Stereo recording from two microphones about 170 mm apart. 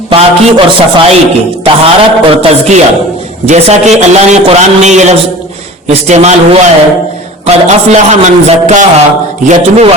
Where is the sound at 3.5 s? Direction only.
40° right (ahead or behind).